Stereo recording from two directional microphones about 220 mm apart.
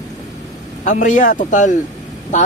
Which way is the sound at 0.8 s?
35° left (ahead or behind).